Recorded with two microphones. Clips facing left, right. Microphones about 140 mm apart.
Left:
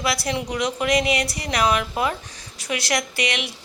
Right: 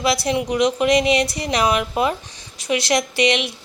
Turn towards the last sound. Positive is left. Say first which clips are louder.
# right 7 dB
turn(degrees=-20)  # may be behind; listen again after turning